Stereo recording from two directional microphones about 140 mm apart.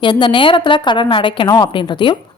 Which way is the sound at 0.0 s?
35° left (ahead or behind).